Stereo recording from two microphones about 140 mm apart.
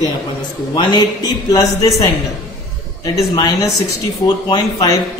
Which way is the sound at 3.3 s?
30° left (ahead or behind).